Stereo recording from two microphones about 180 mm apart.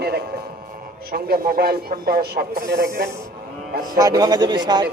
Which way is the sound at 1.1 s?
55° right (ahead or behind).